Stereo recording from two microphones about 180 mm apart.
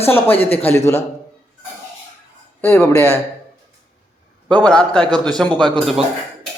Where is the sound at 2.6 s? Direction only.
15° left (ahead or behind).